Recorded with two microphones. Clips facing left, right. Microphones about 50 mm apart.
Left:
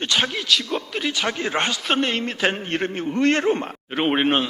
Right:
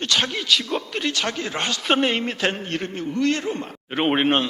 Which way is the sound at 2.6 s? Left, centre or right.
Left.